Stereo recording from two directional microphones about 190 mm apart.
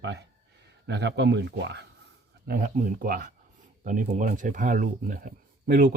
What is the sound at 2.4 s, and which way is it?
Speech, 45° right (ahead or behind).